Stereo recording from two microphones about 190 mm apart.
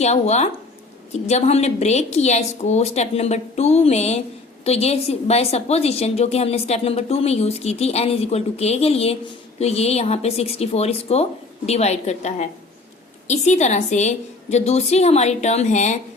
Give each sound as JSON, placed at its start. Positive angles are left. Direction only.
{"t": 0.0, "sound": "a woman's voice", "side_deg": 35}